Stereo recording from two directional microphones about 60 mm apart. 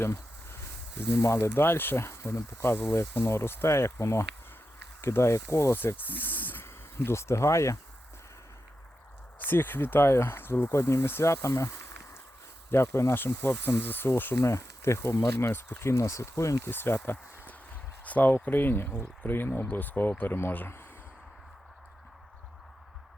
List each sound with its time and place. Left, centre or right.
1.2 s speech: left
9.4 s speech: left
14.4 s speech: left
16.6 s speech: left
17.0 s speech: left